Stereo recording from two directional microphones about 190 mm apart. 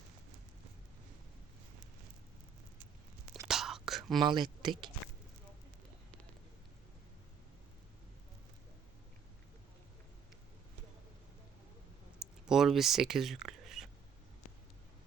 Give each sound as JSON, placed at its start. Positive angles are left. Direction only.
{"t": 3.4, "sound": "whispering", "side_deg": 0}
{"t": 4.2, "sound": "speech", "side_deg": -25}
{"t": 12.2, "sound": "a sound", "side_deg": -5}